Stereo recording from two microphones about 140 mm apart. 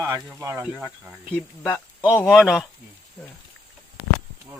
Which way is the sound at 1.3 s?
10° left (ahead or behind).